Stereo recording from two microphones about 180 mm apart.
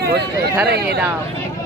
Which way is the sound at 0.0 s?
65° right (ahead or behind).